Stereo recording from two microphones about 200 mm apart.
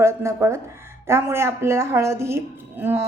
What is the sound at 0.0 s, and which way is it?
Speech, 15° right (ahead or behind).